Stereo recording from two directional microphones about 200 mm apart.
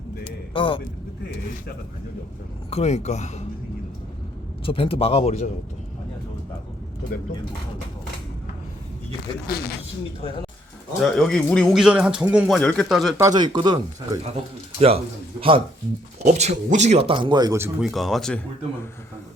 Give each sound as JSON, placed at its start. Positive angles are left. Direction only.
{"t": 0.5, "sound": "a man's voice", "side_deg": 25}
{"t": 2.6, "sound": "speech", "side_deg": 30}
{"t": 4.6, "sound": "a man's voice", "side_deg": 25}
{"t": 9.5, "sound": "speech", "side_deg": 50}
{"t": 10.2, "sound": "a man's voice", "side_deg": 30}
{"t": 11.0, "sound": "speech", "side_deg": 0}
{"t": 13.1, "sound": "speech", "side_deg": -20}
{"t": 17.2, "sound": "speech", "side_deg": -20}
{"t": 17.7, "sound": "speech", "side_deg": 0}